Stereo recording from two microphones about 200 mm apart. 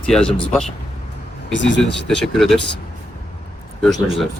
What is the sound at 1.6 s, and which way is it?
Speech, 65° left (ahead or behind).